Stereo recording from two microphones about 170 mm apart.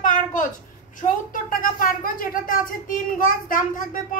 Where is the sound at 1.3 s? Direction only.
55° left (ahead or behind).